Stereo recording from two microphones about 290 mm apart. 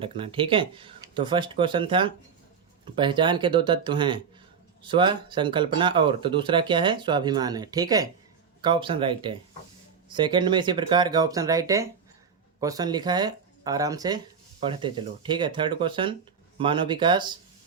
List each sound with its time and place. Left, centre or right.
0.0 s speech: centre